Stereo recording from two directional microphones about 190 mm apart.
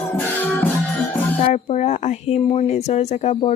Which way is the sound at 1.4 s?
35° left (ahead or behind).